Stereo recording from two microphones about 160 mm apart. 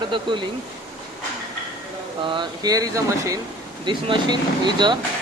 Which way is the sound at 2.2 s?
30° right (ahead or behind).